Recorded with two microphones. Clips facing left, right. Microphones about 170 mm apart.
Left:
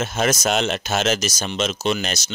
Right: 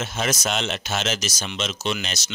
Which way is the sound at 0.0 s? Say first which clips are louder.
Left 5 dB; 45° left (ahead or behind).